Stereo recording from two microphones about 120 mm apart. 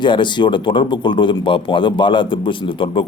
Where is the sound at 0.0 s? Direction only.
40° left (ahead or behind).